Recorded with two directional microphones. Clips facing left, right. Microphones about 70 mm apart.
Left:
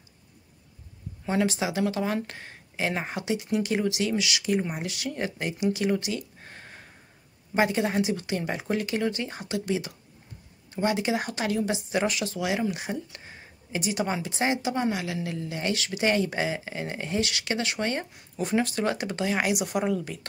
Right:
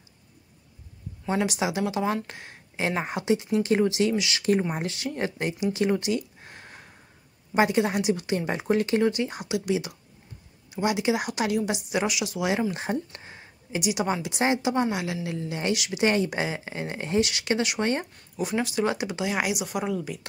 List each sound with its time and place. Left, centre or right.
1.4 s speech: centre
2.2 s a sound: centre
2.9 s speech: centre
6.4 s a sound: centre
7.5 s speech: right
12.4 s speech: right
13.3 s a sound: centre
14.4 s speech: right
18.3 s speech: centre